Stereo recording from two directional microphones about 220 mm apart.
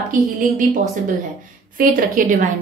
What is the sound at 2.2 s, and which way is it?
Speech, 40° right (ahead or behind).